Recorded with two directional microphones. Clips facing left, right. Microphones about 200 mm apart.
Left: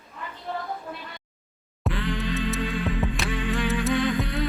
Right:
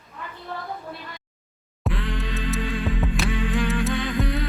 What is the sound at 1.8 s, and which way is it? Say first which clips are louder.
Music: left 1 dB; centre (ahead or behind).